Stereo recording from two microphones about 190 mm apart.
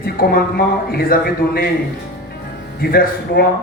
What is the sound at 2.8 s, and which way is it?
Speech, 50° left (ahead or behind).